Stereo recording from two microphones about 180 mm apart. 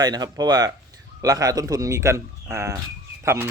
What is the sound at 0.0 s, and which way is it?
A man's voice, 20° right (ahead or behind).